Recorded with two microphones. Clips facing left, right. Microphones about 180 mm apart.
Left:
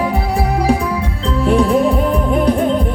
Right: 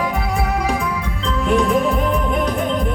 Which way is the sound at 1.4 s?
35° left (ahead or behind).